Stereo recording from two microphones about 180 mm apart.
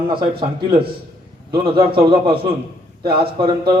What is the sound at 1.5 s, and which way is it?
A man's voice, 25° right (ahead or behind).